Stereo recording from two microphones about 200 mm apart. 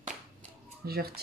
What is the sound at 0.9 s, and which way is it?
Speech, 50° right (ahead or behind).